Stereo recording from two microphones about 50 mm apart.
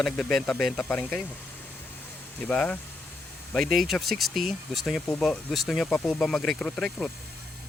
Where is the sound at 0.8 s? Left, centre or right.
Left.